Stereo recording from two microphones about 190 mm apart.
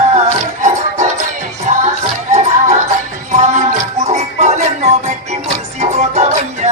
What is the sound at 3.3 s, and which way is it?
Music, 35° right (ahead or behind).